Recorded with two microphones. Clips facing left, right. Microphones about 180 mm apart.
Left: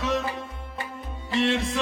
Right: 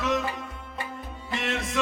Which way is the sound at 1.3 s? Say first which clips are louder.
Left 6 dB; 30° left (ahead or behind).